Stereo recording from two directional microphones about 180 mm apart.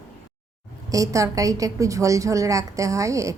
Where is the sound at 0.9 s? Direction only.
20° right (ahead or behind).